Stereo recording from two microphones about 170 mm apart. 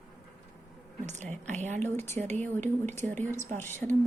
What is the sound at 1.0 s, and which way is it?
Speech, 45° right (ahead or behind).